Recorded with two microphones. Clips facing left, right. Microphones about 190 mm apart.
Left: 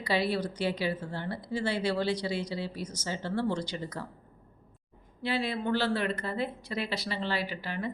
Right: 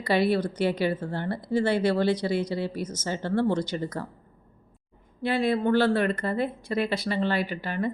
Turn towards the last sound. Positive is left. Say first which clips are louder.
# right 6 dB
turn(degrees=-50)  # may be behind; listen again after turning